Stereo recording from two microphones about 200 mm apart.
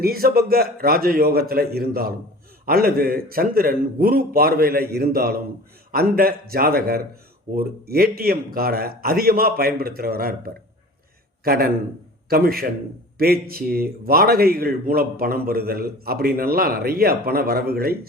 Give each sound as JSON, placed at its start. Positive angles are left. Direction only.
{"t": 0.0, "sound": "a man's voice", "side_deg": -50}